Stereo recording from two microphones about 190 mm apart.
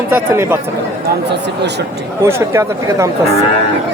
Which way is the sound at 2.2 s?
15° right (ahead or behind).